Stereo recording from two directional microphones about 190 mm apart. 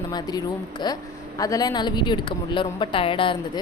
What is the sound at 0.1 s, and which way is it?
Speech, 20° left (ahead or behind).